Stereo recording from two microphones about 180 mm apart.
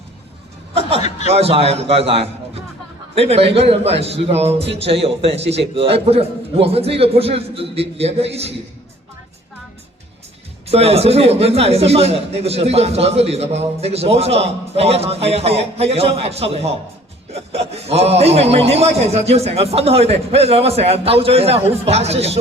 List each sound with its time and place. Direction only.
0.7 s a man's voice: 35° right (ahead or behind)
10.7 s a man's voice: 35° right (ahead or behind)